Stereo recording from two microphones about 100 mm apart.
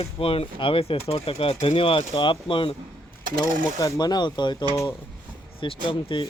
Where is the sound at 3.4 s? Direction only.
40° left (ahead or behind).